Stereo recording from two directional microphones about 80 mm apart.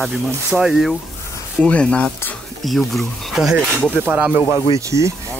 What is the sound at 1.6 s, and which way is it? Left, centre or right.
Speech, centre.